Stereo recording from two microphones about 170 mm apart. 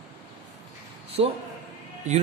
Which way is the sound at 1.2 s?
35° right (ahead or behind).